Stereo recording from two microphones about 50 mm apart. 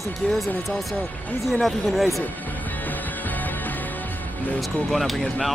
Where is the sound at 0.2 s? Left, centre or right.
Centre.